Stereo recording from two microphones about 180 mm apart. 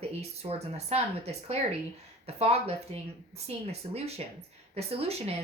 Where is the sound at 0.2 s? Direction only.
35° right (ahead or behind).